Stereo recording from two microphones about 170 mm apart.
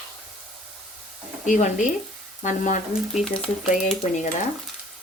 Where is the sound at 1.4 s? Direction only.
50° left (ahead or behind).